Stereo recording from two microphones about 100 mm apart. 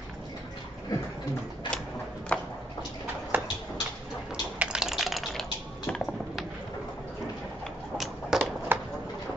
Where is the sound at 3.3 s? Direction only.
20° right (ahead or behind).